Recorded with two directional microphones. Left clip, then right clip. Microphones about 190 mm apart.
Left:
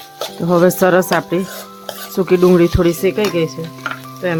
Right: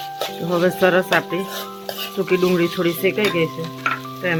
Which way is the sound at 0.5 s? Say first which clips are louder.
Left 5 dB; 40° left (ahead or behind).